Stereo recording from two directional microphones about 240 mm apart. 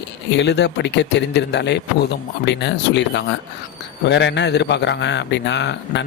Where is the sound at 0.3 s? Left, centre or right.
Left.